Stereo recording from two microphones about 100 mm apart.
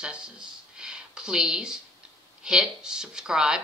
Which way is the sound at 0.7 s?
10° right (ahead or behind).